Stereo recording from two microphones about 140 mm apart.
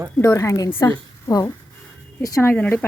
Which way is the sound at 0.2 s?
20° left (ahead or behind).